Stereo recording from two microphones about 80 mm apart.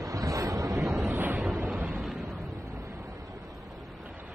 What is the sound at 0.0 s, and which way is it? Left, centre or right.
Wind noise, right.